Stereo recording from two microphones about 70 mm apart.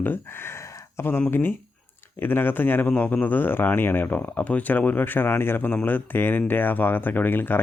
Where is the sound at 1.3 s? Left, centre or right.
Left.